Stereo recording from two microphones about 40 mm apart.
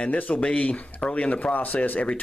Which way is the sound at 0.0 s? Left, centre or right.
Left.